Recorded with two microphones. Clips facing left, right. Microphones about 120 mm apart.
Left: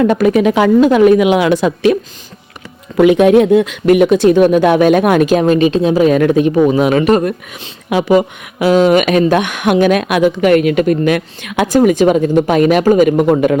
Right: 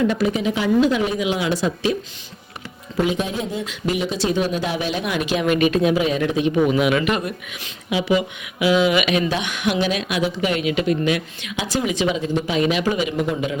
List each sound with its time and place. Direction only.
0.0 s speech: 55° left (ahead or behind)
3.0 s speech: 65° left (ahead or behind); by 6.1 s 35° left (ahead or behind)
6.1 s speech: 50° left (ahead or behind)